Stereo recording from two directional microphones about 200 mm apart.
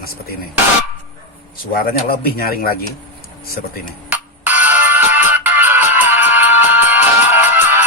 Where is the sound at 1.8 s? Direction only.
50° left (ahead or behind).